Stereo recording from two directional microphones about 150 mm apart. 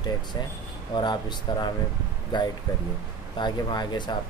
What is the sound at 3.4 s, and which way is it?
Speech, 30° left (ahead or behind).